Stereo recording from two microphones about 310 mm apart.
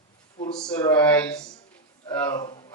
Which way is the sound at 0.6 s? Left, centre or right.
Centre.